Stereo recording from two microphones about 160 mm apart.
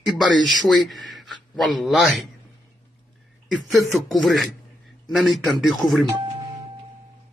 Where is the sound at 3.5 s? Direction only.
Centre (ahead or behind).